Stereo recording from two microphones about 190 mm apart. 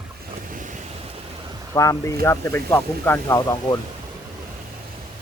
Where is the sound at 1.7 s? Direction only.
15° left (ahead or behind).